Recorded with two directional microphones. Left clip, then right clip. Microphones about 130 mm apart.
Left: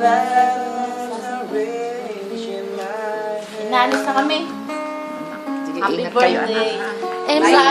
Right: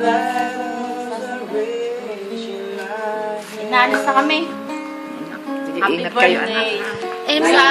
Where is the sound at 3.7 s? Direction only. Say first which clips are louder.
Right 2 dB; 60° left (ahead or behind).